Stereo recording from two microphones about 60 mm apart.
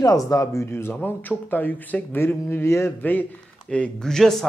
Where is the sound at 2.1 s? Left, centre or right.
Left.